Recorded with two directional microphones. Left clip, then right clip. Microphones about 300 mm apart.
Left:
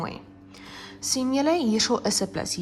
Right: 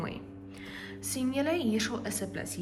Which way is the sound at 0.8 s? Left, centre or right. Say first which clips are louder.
Left 8 dB; centre.